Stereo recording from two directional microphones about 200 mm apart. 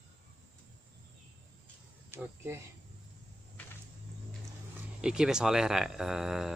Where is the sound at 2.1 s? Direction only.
10° right (ahead or behind).